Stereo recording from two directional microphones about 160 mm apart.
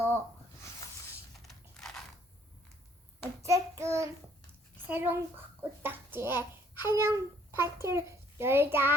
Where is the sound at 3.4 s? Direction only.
20° right (ahead or behind).